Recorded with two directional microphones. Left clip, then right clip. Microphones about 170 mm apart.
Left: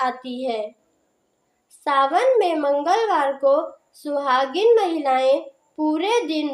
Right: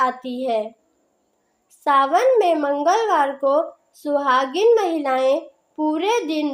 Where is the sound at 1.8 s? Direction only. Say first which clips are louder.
Right 2 dB; 45° right (ahead or behind).